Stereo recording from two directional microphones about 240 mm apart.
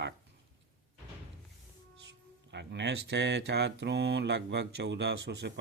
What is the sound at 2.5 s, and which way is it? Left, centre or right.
Speech, right.